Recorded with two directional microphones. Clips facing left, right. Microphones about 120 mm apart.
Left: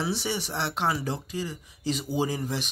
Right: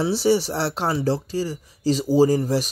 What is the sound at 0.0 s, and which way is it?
Speech, 35° right (ahead or behind).